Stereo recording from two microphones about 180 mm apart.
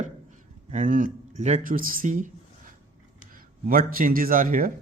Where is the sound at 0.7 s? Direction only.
45° right (ahead or behind).